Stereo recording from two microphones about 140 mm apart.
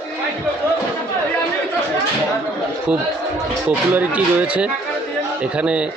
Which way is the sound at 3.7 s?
10° right (ahead or behind).